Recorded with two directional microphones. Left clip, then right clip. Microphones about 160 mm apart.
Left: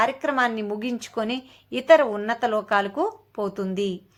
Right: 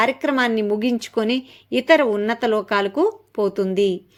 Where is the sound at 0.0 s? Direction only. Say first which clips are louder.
Right 3 dB; 35° right (ahead or behind).